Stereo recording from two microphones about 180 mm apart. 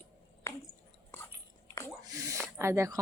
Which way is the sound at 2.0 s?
20° right (ahead or behind).